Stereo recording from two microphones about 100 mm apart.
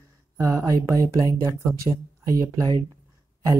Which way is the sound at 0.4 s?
30° right (ahead or behind).